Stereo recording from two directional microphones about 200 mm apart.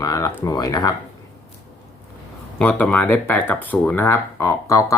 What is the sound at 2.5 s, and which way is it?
Speech, 10° left (ahead or behind).